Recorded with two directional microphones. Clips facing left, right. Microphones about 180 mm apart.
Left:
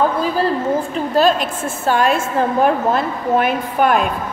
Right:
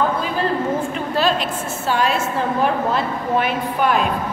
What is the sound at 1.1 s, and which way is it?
A woman's voice, 45° left (ahead or behind).